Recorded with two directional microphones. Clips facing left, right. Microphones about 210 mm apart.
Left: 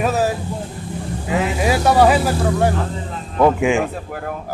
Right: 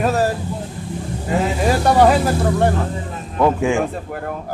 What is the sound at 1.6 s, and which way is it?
Speech, 5° left (ahead or behind).